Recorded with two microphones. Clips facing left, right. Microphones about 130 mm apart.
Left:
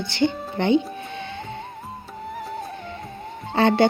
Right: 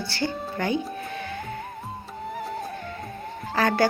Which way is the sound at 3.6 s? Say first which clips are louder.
Left 5 dB; 25° left (ahead or behind).